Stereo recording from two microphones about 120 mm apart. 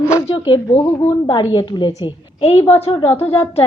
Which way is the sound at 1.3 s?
35° left (ahead or behind).